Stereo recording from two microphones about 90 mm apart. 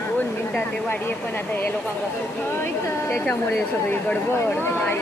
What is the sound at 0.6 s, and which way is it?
Speech, 25° left (ahead or behind).